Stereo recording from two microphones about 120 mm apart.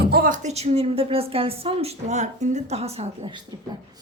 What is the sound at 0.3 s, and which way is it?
A woman's voice, 65° right (ahead or behind).